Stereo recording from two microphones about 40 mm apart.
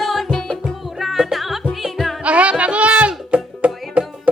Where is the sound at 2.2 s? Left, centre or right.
Right.